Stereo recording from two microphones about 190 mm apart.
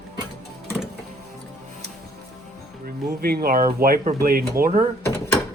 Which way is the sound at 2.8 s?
55° right (ahead or behind).